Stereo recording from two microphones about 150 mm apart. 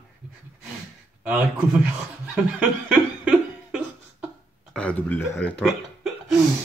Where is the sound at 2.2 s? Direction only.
10° right (ahead or behind).